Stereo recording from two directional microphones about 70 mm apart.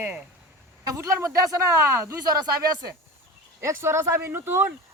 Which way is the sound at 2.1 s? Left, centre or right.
Right.